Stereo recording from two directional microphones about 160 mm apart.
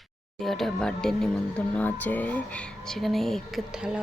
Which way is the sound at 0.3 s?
Centre (ahead or behind).